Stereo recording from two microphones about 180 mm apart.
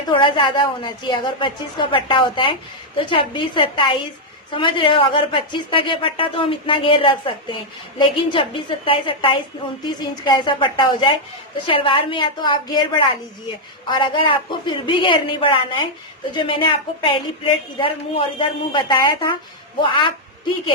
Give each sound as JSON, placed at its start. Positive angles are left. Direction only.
{"t": 0.1, "sound": "a woman's voice", "side_deg": 25}